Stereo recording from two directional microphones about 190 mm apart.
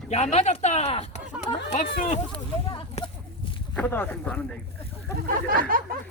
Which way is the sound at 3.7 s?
10° left (ahead or behind).